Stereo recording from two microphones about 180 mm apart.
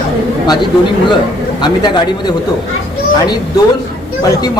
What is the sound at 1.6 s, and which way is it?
Speech, 25° left (ahead or behind).